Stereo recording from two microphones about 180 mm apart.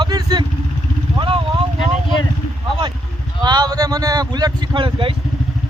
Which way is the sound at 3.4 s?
20° right (ahead or behind).